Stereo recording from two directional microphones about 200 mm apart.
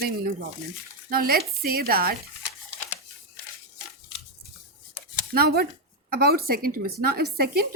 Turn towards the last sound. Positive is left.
turn(degrees=-50)  # may be behind; listen again after turning